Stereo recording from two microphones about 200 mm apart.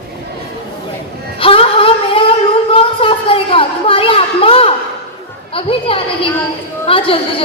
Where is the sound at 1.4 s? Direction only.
30° left (ahead or behind).